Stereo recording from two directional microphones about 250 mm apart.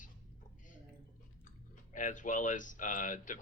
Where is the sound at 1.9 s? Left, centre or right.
Left.